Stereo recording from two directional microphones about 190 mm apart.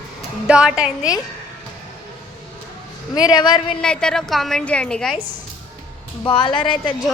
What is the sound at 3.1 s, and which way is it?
Speech, 20° left (ahead or behind).